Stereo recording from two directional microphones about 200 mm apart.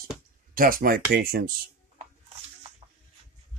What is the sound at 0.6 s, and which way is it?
Speech, 45° right (ahead or behind).